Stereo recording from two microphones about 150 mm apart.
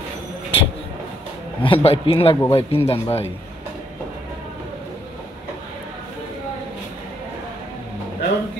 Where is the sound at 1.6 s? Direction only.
35° left (ahead or behind).